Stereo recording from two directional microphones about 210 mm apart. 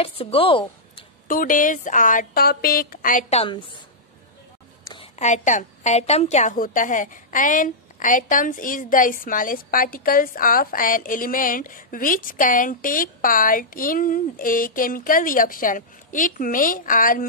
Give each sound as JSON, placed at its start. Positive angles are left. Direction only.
{"t": 0.0, "sound": "speech", "side_deg": 25}
{"t": 1.2, "sound": "a woman's voice", "side_deg": 40}
{"t": 5.2, "sound": "a woman's voice", "side_deg": 35}